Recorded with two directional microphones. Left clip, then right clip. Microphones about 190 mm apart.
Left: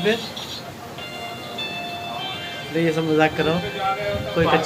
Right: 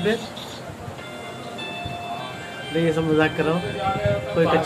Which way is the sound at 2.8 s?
Centre (ahead or behind).